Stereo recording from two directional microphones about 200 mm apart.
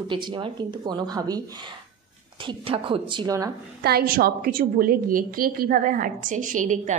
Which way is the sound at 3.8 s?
50° right (ahead or behind).